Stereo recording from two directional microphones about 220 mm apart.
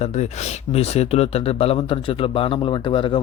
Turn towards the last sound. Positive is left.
turn(degrees=20)  # may be behind; listen again after turning